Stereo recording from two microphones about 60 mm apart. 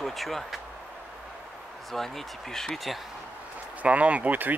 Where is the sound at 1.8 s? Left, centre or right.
Centre.